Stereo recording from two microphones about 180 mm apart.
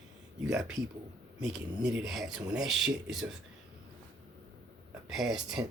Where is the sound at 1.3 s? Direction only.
5° right (ahead or behind).